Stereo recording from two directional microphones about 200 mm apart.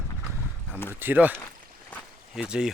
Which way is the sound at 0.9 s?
10° right (ahead or behind).